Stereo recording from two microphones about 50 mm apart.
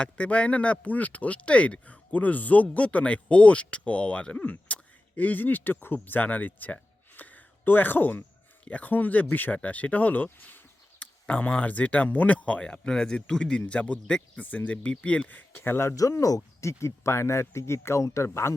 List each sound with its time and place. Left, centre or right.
0.0 s speech: left
7.2 s a sound: left
8.6 s speech: left
15.4 s speech: left